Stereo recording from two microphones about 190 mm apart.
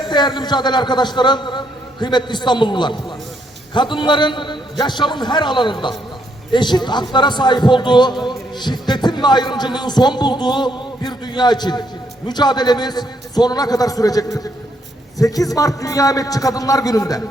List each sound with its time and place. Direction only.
0.0 s a man's voice: 25° left (ahead or behind)